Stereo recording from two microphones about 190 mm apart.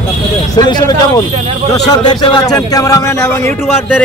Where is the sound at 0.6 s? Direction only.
20° left (ahead or behind).